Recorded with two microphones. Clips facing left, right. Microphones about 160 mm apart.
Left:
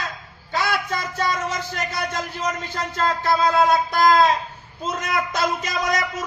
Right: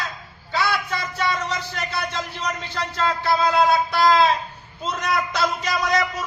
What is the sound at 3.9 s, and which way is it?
Speech, 45° left (ahead or behind).